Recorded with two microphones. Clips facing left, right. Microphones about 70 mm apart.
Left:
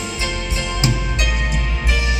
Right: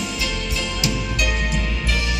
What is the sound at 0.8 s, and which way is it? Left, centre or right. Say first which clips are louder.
Music: left 1 dB; left.